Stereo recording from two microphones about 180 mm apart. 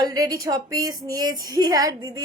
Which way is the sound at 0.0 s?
20° right (ahead or behind).